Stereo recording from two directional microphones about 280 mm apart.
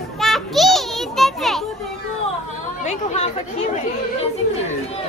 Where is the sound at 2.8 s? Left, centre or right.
Left.